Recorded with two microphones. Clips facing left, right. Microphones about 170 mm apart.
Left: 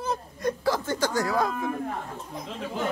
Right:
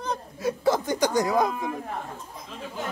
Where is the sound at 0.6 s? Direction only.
20° right (ahead or behind).